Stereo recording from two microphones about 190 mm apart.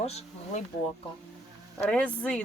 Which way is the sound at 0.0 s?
35° left (ahead or behind).